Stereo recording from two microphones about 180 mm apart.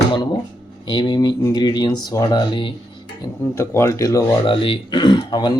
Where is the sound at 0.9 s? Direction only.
25° left (ahead or behind).